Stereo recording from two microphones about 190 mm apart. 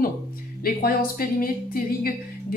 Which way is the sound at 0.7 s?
50° left (ahead or behind).